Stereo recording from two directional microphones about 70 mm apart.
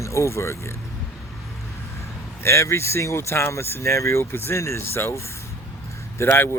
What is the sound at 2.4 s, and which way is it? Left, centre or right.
Speech, left.